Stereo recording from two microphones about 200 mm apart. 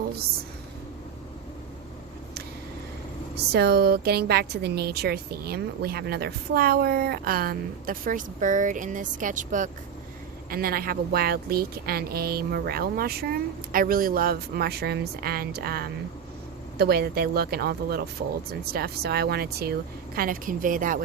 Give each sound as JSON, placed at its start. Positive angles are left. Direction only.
{"t": 3.3, "sound": "a woman's voice", "side_deg": -55}